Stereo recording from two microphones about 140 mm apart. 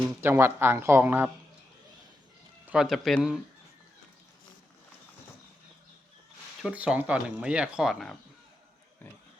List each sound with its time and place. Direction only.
0.2 s speech: 15° right (ahead or behind)
2.6 s speech: 5° right (ahead or behind)
6.6 s speech: 5° right (ahead or behind)